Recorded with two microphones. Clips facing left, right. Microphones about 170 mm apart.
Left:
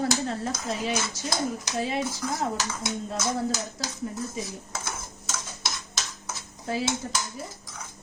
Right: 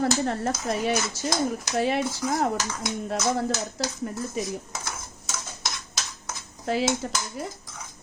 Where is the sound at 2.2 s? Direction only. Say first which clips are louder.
Right 4 dB; 10° right (ahead or behind).